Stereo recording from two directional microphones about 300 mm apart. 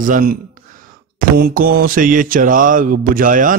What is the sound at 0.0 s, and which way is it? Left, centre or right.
A man's voice, right.